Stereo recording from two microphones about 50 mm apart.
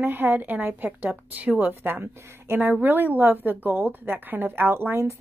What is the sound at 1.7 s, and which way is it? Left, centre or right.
A woman's voice, right.